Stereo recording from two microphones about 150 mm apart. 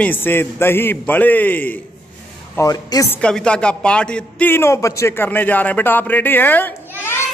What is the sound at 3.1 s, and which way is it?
A woman's voice, 5° left (ahead or behind).